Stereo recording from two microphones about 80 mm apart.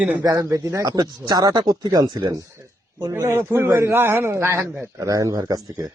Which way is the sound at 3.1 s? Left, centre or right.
Right.